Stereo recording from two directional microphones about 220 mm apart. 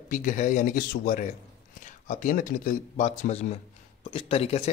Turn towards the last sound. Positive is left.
turn(degrees=25)  # may be behind; listen again after turning